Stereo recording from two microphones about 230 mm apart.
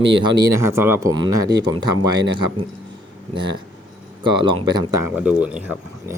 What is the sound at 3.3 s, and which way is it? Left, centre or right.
Speech, right.